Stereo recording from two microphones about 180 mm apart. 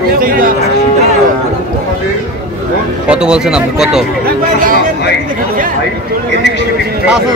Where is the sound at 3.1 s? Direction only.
5° right (ahead or behind).